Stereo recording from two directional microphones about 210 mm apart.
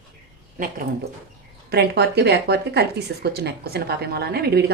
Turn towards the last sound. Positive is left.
turn(degrees=-50)  # may be behind; listen again after turning